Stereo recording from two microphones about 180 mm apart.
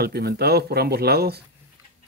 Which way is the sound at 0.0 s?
65° right (ahead or behind).